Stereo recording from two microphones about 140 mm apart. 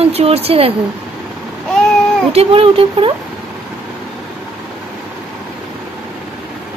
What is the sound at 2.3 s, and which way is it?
Speech, 40° right (ahead or behind).